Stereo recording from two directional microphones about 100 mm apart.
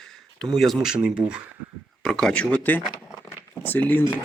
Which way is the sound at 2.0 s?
5° left (ahead or behind).